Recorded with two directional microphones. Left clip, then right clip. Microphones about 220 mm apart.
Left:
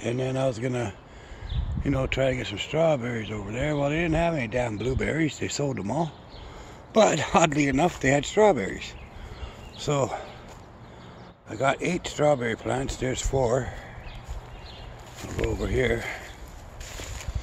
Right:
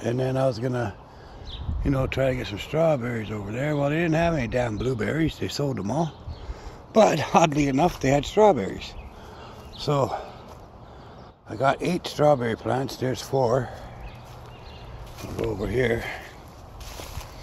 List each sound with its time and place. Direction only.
0.0 s speech: 5° right (ahead or behind)
11.4 s speech: 5° right (ahead or behind)
15.5 s speech: 5° right (ahead or behind)